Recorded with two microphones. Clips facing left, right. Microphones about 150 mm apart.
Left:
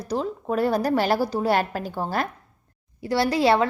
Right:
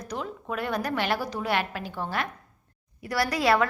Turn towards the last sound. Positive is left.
turn(degrees=25)  # may be behind; listen again after turning